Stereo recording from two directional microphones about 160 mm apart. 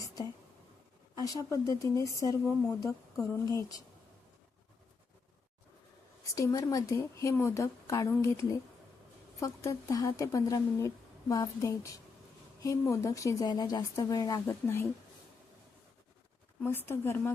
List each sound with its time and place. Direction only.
1.2 s speech: 20° left (ahead or behind)
6.3 s speech: 20° left (ahead or behind)
16.6 s a woman's voice: 15° left (ahead or behind)